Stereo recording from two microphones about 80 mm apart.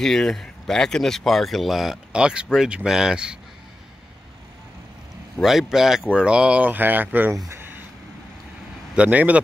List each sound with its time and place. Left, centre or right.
0.0 s speech: centre
5.4 s speech: centre; by 7.3 s right
7.4 s a sound: right
8.9 s speech: centre